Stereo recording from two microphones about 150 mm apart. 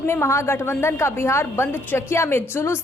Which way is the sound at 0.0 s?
15° left (ahead or behind).